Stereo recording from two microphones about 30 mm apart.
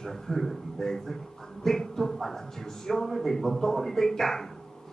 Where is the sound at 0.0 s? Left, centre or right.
Centre.